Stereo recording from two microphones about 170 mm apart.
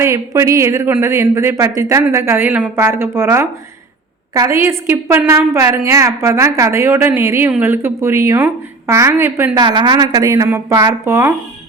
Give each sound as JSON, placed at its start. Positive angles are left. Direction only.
{"t": 0.0, "sound": "speech", "side_deg": -15}
{"t": 9.6, "sound": "speech", "side_deg": -25}